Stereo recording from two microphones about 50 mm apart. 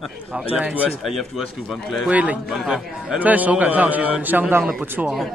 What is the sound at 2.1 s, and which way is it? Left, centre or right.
Speech, right.